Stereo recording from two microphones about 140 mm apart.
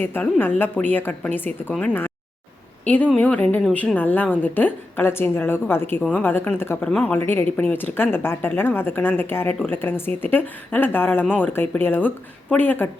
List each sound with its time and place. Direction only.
0.0 s a woman's voice: 15° left (ahead or behind)